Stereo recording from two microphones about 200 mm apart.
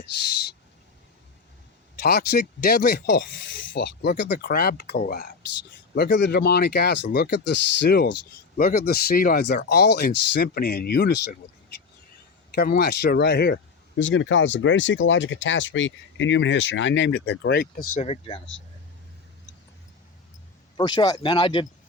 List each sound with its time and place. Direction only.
2.0 s speech: 50° left (ahead or behind)
5.9 s speech: 60° left (ahead or behind)
14.0 s speech: 70° left (ahead or behind); by 18.0 s 50° left (ahead or behind)
18.0 s speech: 30° left (ahead or behind)
20.7 s speech: 20° left (ahead or behind)